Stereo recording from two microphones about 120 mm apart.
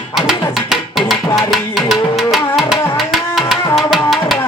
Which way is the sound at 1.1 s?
Centre (ahead or behind).